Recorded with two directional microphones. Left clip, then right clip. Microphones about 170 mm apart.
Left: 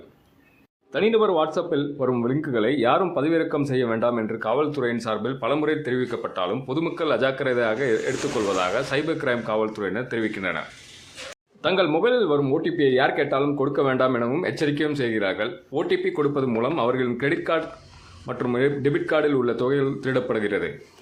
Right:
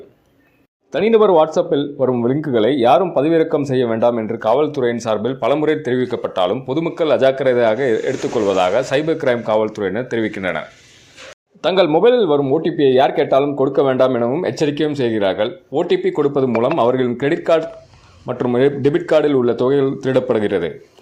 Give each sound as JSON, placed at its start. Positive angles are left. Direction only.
{"t": 0.9, "sound": "speech", "side_deg": -30}
{"t": 11.6, "sound": "a man's voice", "side_deg": -35}
{"t": 11.9, "sound": "speech", "side_deg": -25}